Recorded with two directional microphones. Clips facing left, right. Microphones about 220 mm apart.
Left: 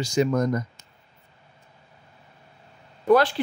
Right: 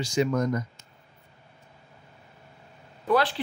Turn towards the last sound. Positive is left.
turn(degrees=45)  # may be behind; listen again after turning